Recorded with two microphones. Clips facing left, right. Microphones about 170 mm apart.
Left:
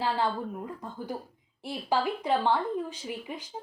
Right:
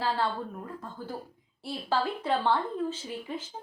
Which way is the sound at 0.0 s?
15° left (ahead or behind).